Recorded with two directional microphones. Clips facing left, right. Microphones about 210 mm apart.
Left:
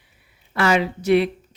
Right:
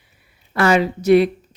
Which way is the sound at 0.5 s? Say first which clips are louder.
Right 3 dB; 45° right (ahead or behind).